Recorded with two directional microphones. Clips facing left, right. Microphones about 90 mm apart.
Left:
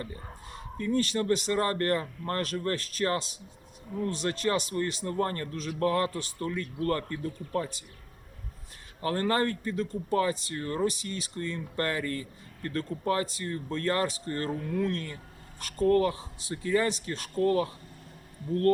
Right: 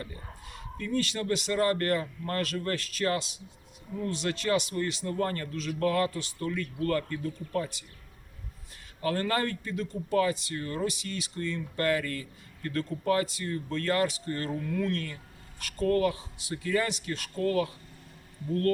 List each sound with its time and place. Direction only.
0.0 s speech: 35° left (ahead or behind)
6.1 s speech: 40° left (ahead or behind)
6.4 s speech: 25° left (ahead or behind)
9.0 s speech: 30° left (ahead or behind)